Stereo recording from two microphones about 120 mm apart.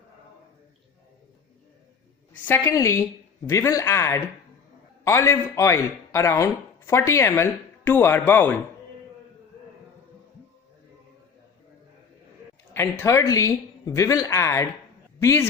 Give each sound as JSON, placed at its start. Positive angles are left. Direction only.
{"t": 2.5, "sound": "speech", "side_deg": 25}
{"t": 12.7, "sound": "a woman's voice", "side_deg": 20}